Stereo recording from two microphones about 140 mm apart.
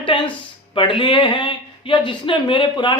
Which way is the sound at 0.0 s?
35° left (ahead or behind).